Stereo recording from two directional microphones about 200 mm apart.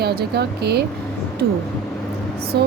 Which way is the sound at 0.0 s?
55° right (ahead or behind).